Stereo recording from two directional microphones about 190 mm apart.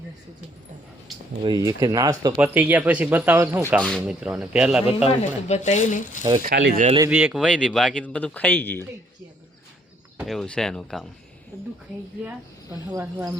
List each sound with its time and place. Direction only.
1.4 s speech: 20° right (ahead or behind)
2.3 s speech: 10° right (ahead or behind)
3.8 s speech: 5° left (ahead or behind)
5.0 s speech: 35° left (ahead or behind)
6.5 s speech: 60° right (ahead or behind)
7.1 s speech: 10° right (ahead or behind)
7.4 s speech: 5° left (ahead or behind)
10.2 s speech: 5° left (ahead or behind)
13.0 s speech: 10° right (ahead or behind)